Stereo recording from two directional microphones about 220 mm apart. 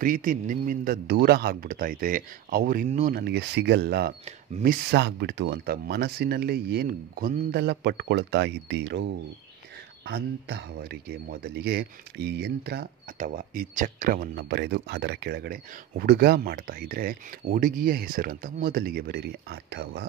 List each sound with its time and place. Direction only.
0.0 s a man's voice: 40° right (ahead or behind)